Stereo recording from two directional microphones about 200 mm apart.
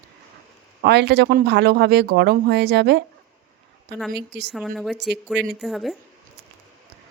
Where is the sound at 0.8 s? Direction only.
55° right (ahead or behind).